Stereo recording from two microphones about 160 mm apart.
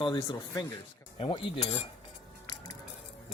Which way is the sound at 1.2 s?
35° left (ahead or behind).